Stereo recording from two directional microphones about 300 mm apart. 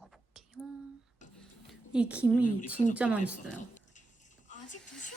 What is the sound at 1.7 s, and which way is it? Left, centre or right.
A woman's voice, centre.